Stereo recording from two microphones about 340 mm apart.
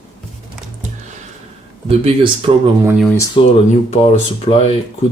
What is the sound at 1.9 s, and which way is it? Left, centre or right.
Speech, centre.